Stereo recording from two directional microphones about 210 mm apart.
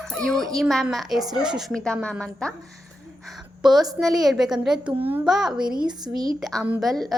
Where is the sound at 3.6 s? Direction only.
Centre (ahead or behind).